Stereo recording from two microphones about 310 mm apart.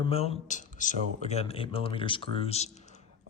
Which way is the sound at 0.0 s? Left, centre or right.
Centre.